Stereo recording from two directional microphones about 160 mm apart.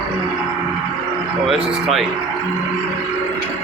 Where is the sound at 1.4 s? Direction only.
Centre (ahead or behind).